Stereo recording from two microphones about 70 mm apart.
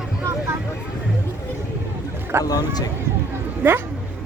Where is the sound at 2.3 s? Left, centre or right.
Right.